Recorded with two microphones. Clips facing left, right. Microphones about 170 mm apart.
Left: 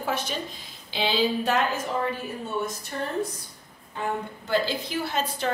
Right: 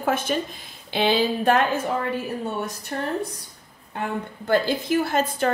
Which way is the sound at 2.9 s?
55° right (ahead or behind).